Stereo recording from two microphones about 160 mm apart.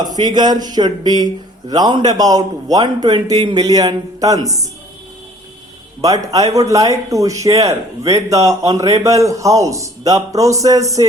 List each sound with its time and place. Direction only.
0.0 s speech: 25° right (ahead or behind)
6.0 s speech: 20° right (ahead or behind)